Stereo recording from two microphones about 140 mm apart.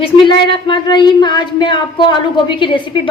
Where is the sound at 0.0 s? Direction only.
35° left (ahead or behind).